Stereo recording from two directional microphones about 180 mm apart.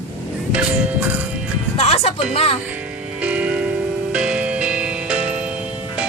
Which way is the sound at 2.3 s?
35° left (ahead or behind).